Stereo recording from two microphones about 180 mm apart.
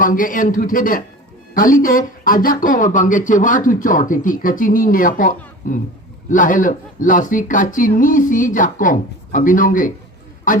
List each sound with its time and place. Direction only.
0.0 s speech: 50° left (ahead or behind)